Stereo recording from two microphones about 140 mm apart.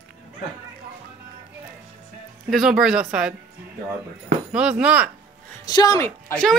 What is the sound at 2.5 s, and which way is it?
Speech, 5° right (ahead or behind).